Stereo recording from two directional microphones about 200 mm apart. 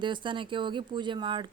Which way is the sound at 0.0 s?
25° right (ahead or behind).